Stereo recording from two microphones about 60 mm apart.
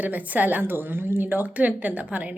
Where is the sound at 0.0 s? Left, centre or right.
Right.